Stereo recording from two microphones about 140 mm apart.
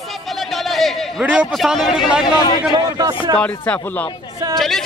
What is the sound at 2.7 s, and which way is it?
Speech, 25° right (ahead or behind).